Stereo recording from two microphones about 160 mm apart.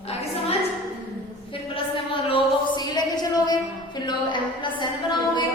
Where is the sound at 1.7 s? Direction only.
35° left (ahead or behind).